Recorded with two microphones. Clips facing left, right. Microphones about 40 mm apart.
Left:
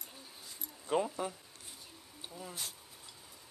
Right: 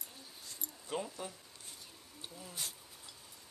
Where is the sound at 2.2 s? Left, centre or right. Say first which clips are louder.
Left 4 dB; centre.